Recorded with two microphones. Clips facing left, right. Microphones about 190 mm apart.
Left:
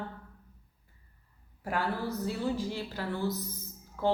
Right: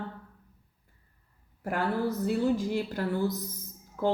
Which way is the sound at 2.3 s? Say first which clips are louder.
Right 6 dB; 50° right (ahead or behind).